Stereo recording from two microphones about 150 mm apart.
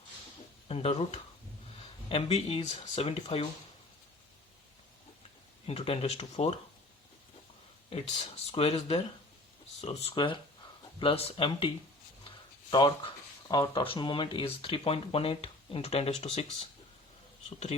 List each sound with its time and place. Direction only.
0.7 s speech: 40° left (ahead or behind)
5.6 s speech: 40° left (ahead or behind)
8.4 s speech: 45° left (ahead or behind)
10.2 s speech: 30° left (ahead or behind)
12.7 s speech: 30° left (ahead or behind); by 16.6 s 45° left (ahead or behind)